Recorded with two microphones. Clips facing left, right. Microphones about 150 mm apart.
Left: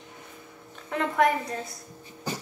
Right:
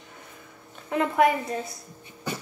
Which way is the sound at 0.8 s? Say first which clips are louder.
Right 2 dB; 10° right (ahead or behind).